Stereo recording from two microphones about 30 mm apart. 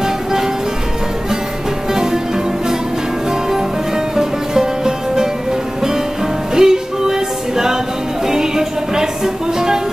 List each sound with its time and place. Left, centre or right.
0.0 s music: centre
3.3 s music: centre
6.5 s music: centre